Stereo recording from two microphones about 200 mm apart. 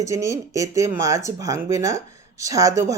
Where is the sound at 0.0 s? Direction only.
15° right (ahead or behind).